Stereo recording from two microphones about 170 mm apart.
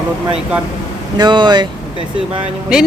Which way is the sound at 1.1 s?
25° right (ahead or behind).